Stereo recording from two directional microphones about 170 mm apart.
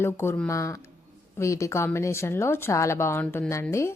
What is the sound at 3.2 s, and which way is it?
Speech, 5° left (ahead or behind).